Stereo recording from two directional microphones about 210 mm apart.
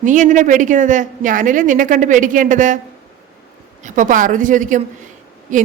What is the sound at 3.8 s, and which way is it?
Speech, 40° right (ahead or behind).